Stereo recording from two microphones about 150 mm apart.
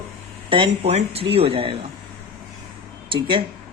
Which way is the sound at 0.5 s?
40° right (ahead or behind).